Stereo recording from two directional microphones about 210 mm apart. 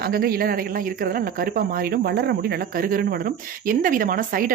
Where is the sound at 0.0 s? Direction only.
45° right (ahead or behind).